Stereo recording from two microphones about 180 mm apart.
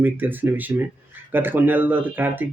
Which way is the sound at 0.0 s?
10° right (ahead or behind).